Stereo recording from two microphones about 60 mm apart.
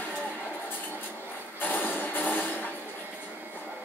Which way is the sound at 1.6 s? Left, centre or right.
Left.